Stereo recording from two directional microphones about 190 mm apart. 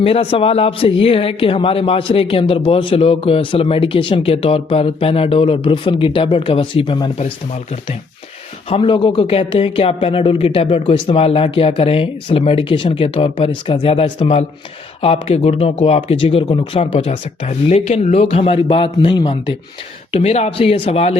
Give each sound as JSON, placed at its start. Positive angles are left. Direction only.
{"t": 0.0, "sound": "a man's voice", "side_deg": 30}